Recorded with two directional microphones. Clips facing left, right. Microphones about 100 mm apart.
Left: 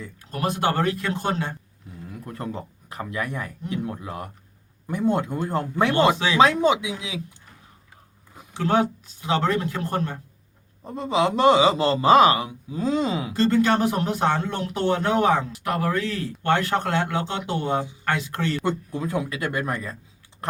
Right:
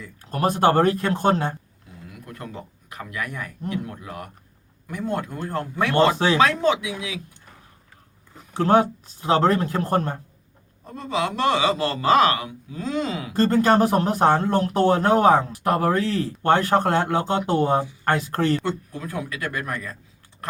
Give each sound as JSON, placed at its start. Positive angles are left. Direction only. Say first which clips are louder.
{"t": 0.3, "sound": "speech", "louder": "right 5 dB", "side_deg": -40}
{"t": 2.2, "sound": "a man's voice", "louder": "left 4 dB", "side_deg": 30}
{"t": 8.5, "sound": "speech", "louder": "right 4 dB", "side_deg": -40}
{"t": 10.8, "sound": "a man's voice", "louder": "left 3 dB", "side_deg": 20}
{"t": 13.3, "sound": "speech", "louder": "right 3 dB", "side_deg": -40}
{"t": 18.9, "sound": "a man's voice", "louder": "left 4 dB", "side_deg": 20}
{"t": 20.4, "sound": "typing", "louder": "left 3 dB", "side_deg": 25}